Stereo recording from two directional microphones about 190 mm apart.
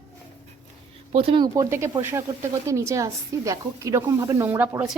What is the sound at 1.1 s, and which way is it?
A woman's voice, 30° right (ahead or behind).